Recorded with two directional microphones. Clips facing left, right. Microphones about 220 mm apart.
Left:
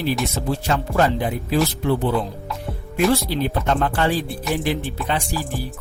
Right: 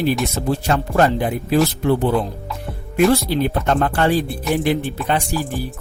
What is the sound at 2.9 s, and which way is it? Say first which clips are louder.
Speech: right 4 dB; 50° right (ahead or behind).